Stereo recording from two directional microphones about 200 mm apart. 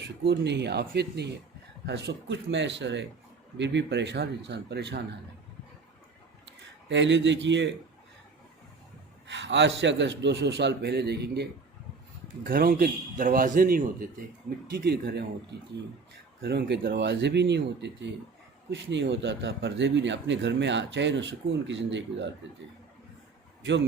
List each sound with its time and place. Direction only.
0.3 s speech: 60° right (ahead or behind)
6.8 s speech: 65° right (ahead or behind)
9.3 s speech: 60° right (ahead or behind)
12.5 s a man's voice: 45° right (ahead or behind)
16.4 s speech: 55° right (ahead or behind)